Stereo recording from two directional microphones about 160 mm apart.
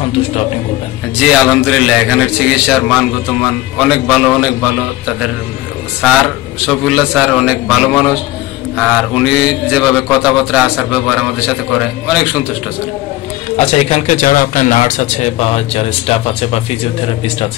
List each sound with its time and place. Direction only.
1.1 s mantra: 5° right (ahead or behind)
6.6 s mantra: 5° right (ahead or behind)
13.6 s speech: 40° left (ahead or behind)